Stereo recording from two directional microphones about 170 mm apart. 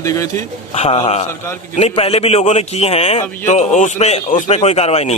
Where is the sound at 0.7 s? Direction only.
35° left (ahead or behind).